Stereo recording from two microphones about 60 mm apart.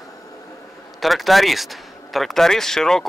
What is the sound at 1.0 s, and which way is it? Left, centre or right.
Speech, centre.